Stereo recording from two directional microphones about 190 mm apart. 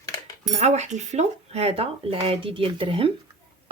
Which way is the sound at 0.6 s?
35° right (ahead or behind).